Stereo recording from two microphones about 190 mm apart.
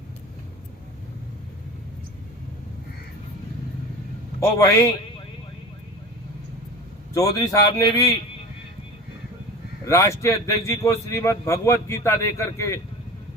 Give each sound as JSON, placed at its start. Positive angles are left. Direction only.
{"t": 4.4, "sound": "a man's voice", "side_deg": 15}
{"t": 7.1, "sound": "a man's voice", "side_deg": 15}
{"t": 9.8, "sound": "a man's voice", "side_deg": 15}